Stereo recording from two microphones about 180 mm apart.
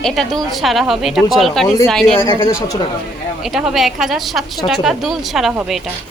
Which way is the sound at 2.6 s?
20° left (ahead or behind).